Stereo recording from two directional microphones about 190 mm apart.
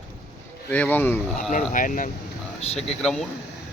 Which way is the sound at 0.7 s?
10° left (ahead or behind).